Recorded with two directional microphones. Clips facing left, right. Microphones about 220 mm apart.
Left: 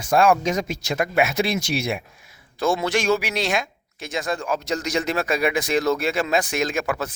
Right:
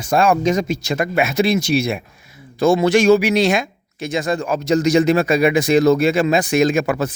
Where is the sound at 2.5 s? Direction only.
5° right (ahead or behind).